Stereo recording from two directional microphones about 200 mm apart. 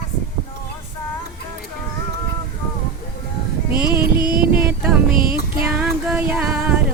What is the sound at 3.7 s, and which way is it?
Music, 50° right (ahead or behind).